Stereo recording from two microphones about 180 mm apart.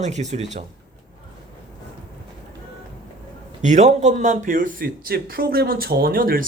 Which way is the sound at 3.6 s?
40° right (ahead or behind).